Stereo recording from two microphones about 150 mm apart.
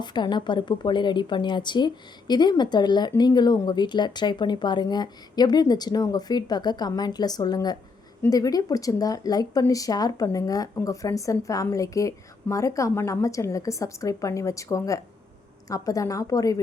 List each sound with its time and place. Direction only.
0.0 s a woman's voice: 30° left (ahead or behind)